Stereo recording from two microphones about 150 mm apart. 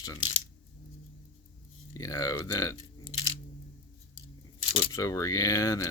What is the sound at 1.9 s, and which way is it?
Speech, 20° left (ahead or behind).